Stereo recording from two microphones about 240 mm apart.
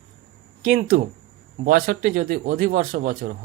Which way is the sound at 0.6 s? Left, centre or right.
Right.